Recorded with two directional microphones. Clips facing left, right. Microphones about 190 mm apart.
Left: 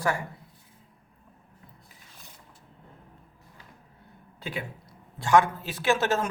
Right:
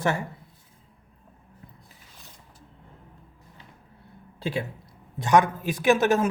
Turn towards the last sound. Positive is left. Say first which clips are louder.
# right 5 dB
turn(degrees=-15)  # may be behind; listen again after turning